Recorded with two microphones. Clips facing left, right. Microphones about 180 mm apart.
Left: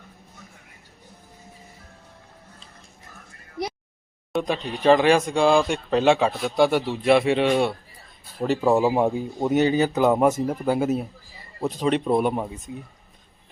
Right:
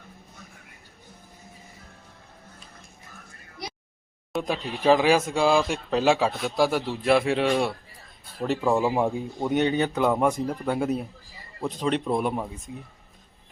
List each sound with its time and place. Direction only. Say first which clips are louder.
4.3 s speech: left 3 dB; 5° right (ahead or behind)